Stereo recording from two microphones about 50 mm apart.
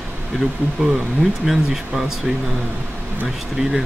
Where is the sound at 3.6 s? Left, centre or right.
Centre.